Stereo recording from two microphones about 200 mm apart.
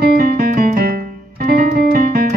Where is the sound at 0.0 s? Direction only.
50° right (ahead or behind).